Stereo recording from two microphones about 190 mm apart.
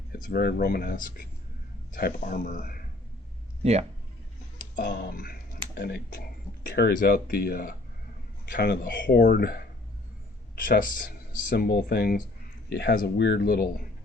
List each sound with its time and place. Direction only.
0.1 s speech: 50° left (ahead or behind)
3.6 s speech: 35° right (ahead or behind)
4.8 s speech: 55° left (ahead or behind)
8.5 s speech: 60° left (ahead or behind)